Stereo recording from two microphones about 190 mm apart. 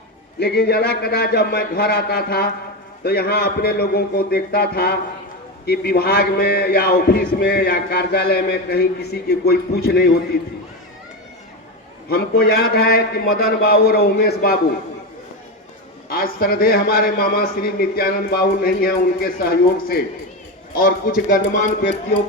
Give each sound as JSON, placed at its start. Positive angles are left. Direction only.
{"t": 0.3, "sound": "a man's voice", "side_deg": 60}
{"t": 12.0, "sound": "a man's voice", "side_deg": 55}
{"t": 16.0, "sound": "a man's voice", "side_deg": 50}